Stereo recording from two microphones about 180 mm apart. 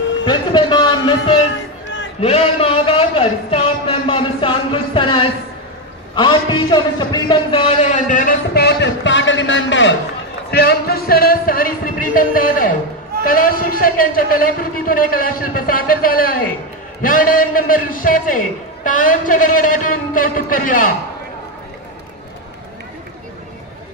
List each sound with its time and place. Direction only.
0.2 s music: 25° left (ahead or behind)
2.1 s a sound: 35° left (ahead or behind)
6.1 s a man's voice: 25° left (ahead or behind); by 9.9 s 90° left
10.5 s a man's voice: 60° left (ahead or behind)